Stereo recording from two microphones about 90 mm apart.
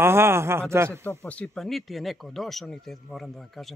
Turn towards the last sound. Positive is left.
turn(degrees=0)  # may be behind; listen again after turning